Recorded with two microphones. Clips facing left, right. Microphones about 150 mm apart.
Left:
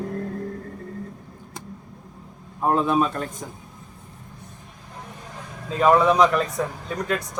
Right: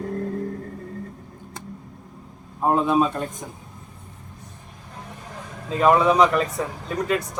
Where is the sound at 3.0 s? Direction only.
20° right (ahead or behind).